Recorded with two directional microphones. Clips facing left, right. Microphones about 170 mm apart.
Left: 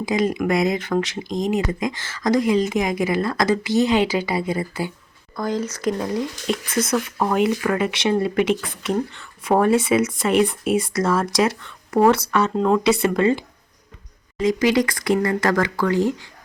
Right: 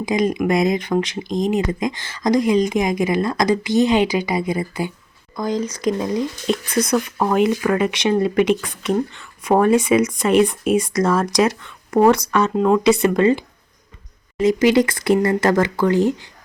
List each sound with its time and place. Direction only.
0.0 s speech: 20° right (ahead or behind)
6.9 s speech: 5° right (ahead or behind)
7.7 s speech: 20° right (ahead or behind)